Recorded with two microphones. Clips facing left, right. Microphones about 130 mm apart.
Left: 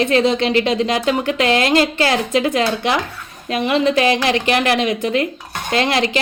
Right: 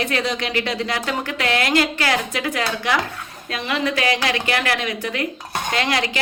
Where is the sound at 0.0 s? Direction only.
25° left (ahead or behind).